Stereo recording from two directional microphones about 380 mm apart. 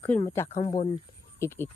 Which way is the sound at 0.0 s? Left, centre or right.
Centre.